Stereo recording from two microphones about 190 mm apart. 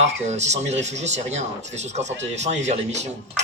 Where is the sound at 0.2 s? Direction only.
35° right (ahead or behind).